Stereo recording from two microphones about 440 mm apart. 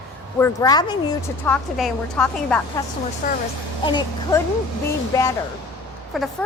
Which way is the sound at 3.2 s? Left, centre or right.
Centre.